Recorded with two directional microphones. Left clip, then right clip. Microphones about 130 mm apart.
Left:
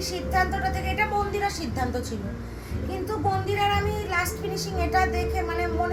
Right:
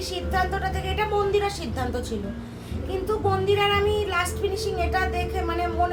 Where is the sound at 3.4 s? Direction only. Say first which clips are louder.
Right 3 dB; 15° right (ahead or behind).